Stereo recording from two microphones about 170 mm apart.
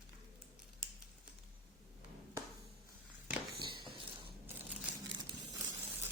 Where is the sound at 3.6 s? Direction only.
30° right (ahead or behind).